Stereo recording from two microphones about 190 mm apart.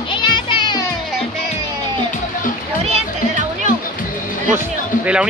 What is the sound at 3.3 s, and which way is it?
Music, 40° right (ahead or behind).